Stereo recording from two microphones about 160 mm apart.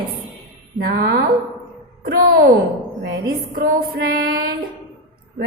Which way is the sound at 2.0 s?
70° right (ahead or behind).